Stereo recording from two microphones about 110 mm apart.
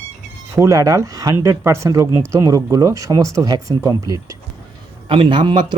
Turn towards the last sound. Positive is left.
turn(degrees=-45)  # may be behind; listen again after turning